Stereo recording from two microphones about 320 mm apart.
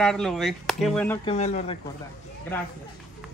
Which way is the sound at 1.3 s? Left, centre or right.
Left.